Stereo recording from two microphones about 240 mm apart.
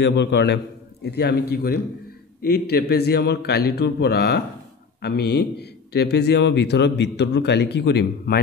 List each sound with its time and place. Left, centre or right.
0.0 s a man's voice: left